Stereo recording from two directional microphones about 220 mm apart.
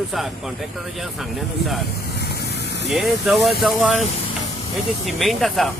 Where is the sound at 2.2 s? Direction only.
45° left (ahead or behind).